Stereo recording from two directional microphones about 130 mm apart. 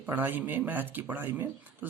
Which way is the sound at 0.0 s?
15° right (ahead or behind).